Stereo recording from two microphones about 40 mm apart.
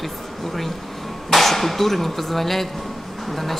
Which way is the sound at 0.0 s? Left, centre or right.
Centre.